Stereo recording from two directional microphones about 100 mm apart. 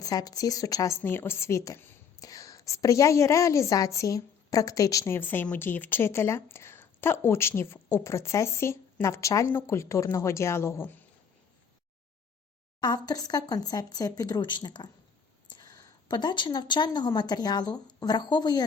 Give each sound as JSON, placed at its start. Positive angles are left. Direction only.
{"t": 0.0, "sound": "speech", "side_deg": 40}
{"t": 1.0, "sound": "a woman's voice", "side_deg": 25}
{"t": 12.8, "sound": "a woman's voice", "side_deg": 40}